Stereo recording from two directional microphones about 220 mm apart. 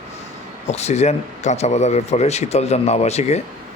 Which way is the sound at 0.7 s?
30° left (ahead or behind).